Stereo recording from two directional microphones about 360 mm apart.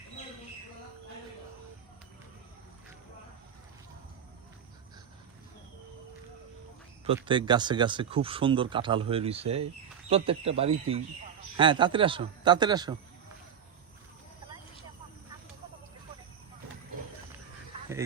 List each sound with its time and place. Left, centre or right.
7.2 s speech: centre